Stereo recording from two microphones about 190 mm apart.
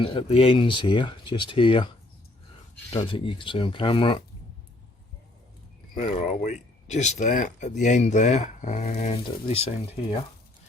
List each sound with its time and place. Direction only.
0.0 s speech: 30° left (ahead or behind)
2.9 s speech: 25° left (ahead or behind)
6.0 s speech: 40° left (ahead or behind)